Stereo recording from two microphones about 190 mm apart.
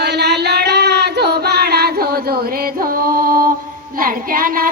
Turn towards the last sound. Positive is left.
turn(degrees=-50)  # may be behind; listen again after turning